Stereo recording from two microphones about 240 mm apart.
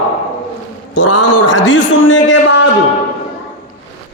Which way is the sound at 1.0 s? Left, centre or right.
Left.